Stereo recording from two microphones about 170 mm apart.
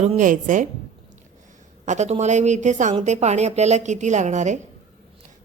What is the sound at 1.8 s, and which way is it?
A woman's voice, 45° right (ahead or behind).